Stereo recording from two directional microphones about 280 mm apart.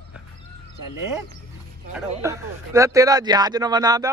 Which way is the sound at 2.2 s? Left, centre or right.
Centre.